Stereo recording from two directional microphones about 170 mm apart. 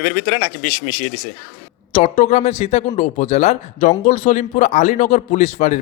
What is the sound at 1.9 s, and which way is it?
A man's voice, 40° left (ahead or behind).